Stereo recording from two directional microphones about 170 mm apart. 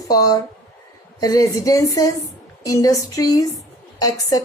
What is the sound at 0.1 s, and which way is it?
A woman's voice, 20° left (ahead or behind).